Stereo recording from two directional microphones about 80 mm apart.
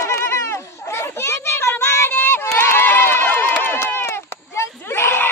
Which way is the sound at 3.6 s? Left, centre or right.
Left.